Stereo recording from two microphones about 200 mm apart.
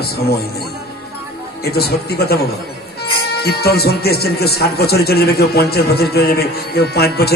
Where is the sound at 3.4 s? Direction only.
50° left (ahead or behind).